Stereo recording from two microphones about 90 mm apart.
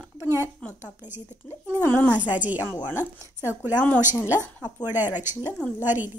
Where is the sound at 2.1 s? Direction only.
15° right (ahead or behind).